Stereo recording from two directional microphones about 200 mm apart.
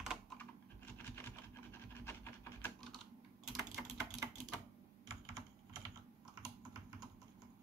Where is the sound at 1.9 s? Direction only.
10° left (ahead or behind).